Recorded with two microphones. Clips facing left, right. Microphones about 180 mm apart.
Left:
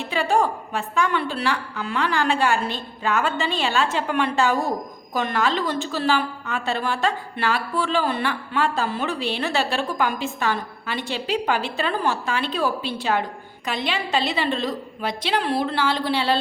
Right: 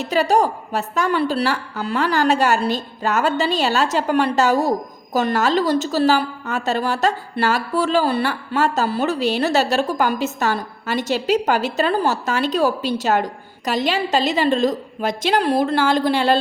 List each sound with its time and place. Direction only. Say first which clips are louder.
0.0 s a woman's voice: right 4 dB; 40° right (ahead or behind)